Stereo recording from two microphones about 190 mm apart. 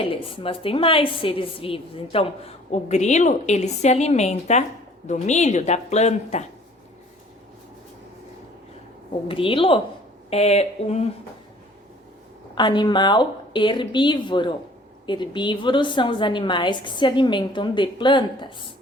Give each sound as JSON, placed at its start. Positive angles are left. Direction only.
{"t": 0.0, "sound": "a woman's voice", "side_deg": 30}
{"t": 9.2, "sound": "a woman's voice", "side_deg": 30}
{"t": 12.5, "sound": "a woman's voice", "side_deg": 25}